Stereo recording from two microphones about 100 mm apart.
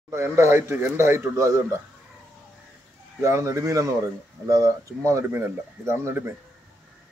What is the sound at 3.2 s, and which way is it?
Speech, 30° right (ahead or behind).